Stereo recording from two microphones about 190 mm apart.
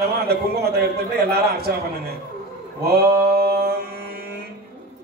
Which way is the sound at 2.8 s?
55° right (ahead or behind).